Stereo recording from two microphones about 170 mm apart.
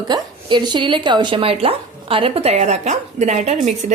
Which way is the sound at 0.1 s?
25° right (ahead or behind).